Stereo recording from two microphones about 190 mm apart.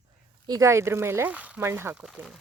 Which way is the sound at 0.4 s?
20° right (ahead or behind).